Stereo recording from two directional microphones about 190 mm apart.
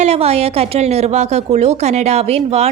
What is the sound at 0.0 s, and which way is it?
A woman's voice, 35° right (ahead or behind).